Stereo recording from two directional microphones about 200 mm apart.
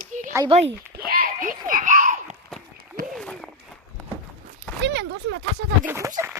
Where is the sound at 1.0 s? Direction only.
45° right (ahead or behind).